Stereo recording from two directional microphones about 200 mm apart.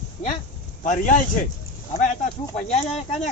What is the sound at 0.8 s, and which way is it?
Speech, 40° left (ahead or behind).